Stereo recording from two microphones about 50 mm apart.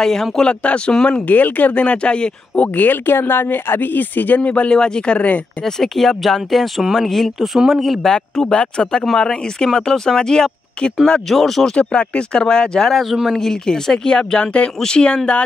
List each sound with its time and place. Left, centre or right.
0.0 s speech: centre
0.5 s speech: left
2.7 s speech: left
4.4 s speech: left
5.6 s speech: centre
7.3 s speech: centre
8.1 s speech: centre
11.7 s speech: left
12.9 s speech: centre
13.4 s speech: centre